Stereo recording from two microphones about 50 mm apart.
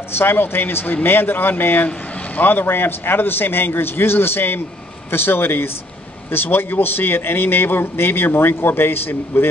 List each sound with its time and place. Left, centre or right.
0.2 s a man's voice: left